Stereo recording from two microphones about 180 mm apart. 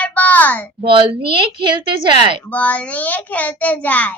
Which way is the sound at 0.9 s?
30° right (ahead or behind).